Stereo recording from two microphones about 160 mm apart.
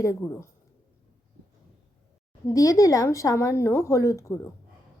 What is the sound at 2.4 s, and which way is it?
A woman's voice, 20° left (ahead or behind).